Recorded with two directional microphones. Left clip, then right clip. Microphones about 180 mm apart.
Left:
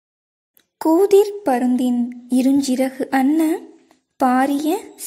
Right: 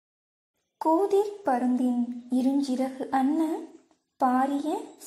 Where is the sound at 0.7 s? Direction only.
35° left (ahead or behind).